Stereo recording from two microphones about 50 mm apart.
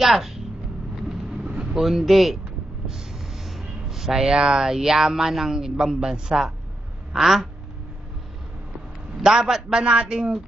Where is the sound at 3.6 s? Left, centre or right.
Centre.